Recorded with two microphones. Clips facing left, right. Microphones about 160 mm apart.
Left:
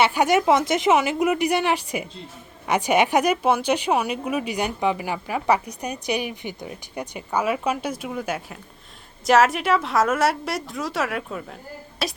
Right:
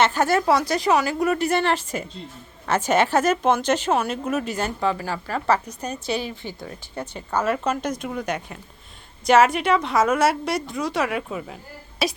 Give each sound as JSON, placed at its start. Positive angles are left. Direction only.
{"t": 0.0, "sound": "a woman's voice", "side_deg": 15}